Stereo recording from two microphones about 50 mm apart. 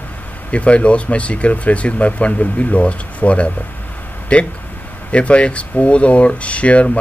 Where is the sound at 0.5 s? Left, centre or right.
Left.